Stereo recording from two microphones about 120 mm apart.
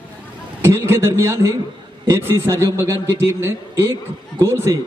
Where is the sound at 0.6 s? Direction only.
20° right (ahead or behind).